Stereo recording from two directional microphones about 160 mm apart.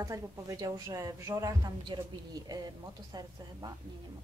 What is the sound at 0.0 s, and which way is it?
Speech, 20° right (ahead or behind).